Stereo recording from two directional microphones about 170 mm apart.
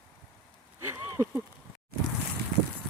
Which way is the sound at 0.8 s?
15° right (ahead or behind).